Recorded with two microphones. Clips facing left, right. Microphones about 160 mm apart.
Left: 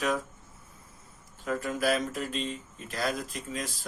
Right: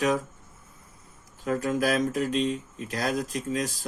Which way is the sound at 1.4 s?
45° right (ahead or behind).